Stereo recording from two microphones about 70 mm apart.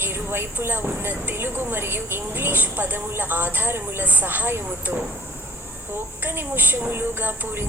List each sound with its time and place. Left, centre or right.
0.0 s a woman's voice: right
6.2 s a woman's voice: right